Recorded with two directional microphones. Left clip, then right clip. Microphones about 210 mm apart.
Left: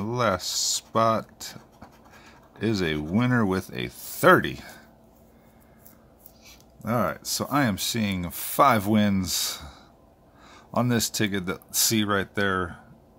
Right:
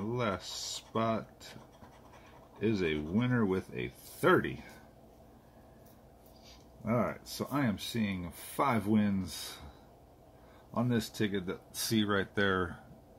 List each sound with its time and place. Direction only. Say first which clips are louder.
0.1 s speech: left 11 dB; 35° left (ahead or behind)
2.6 s speech: left 6 dB; 35° left (ahead or behind)
6.4 s speech: left 6 dB; 30° left (ahead or behind)
10.7 s speech: left 9 dB; 35° left (ahead or behind); by 12.7 s 15° left (ahead or behind)